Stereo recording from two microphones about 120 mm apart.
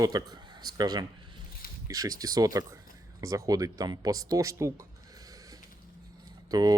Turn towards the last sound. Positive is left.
turn(degrees=-30)  # may be behind; listen again after turning